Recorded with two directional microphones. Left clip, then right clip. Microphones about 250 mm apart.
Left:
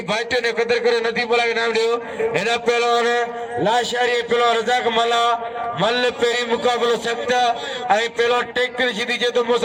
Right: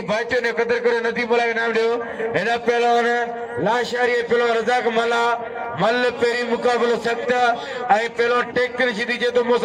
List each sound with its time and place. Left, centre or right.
0.1 s a man's voice: left